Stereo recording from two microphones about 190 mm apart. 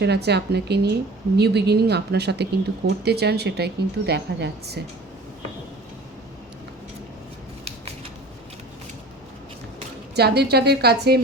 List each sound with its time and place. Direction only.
0.0 s speech: 60° right (ahead or behind)
10.2 s speech: 60° right (ahead or behind)